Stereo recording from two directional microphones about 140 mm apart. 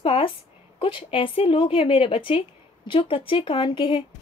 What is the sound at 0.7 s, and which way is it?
Speech, 40° left (ahead or behind).